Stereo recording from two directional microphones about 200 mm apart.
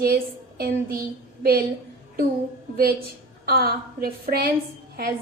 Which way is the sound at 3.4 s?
50° right (ahead or behind).